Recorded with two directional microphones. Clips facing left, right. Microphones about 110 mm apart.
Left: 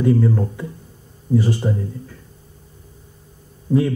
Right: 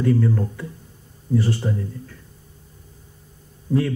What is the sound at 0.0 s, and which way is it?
Speech, 20° left (ahead or behind).